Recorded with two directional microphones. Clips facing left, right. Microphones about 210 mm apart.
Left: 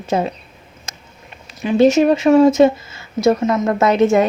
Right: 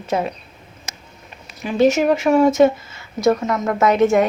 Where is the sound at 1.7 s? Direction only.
30° left (ahead or behind).